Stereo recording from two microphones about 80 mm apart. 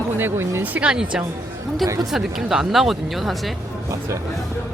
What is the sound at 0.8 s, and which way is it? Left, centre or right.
Speech, centre.